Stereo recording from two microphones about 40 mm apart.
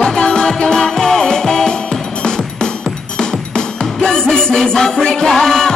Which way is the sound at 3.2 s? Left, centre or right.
Centre.